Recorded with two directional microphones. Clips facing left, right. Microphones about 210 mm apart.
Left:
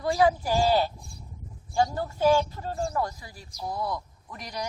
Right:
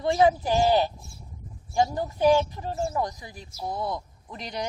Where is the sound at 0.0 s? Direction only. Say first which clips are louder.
Right 2 dB; 20° right (ahead or behind).